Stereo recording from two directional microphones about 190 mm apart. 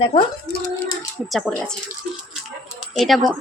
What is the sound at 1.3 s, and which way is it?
Speech, 5° left (ahead or behind).